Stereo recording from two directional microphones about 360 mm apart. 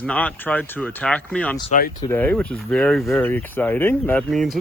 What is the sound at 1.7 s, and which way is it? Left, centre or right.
Speech, left.